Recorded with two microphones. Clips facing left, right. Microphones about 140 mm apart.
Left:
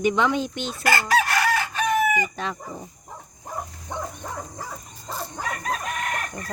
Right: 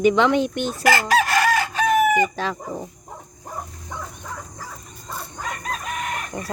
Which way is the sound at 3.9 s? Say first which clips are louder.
Left 3 dB; 25° left (ahead or behind).